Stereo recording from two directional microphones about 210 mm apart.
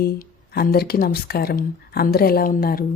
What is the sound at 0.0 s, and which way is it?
Speech, 45° left (ahead or behind).